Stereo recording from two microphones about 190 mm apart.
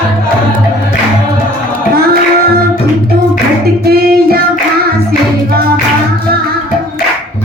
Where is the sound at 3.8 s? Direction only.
55° right (ahead or behind).